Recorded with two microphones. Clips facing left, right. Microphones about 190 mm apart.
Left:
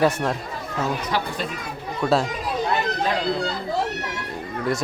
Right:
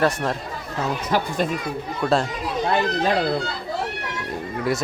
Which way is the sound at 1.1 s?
45° right (ahead or behind).